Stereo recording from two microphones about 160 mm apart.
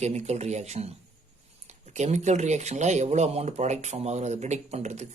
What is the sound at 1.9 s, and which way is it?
Speech, 45° right (ahead or behind).